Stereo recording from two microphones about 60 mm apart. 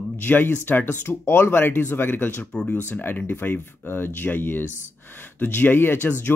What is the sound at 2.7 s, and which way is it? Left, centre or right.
Speech, left.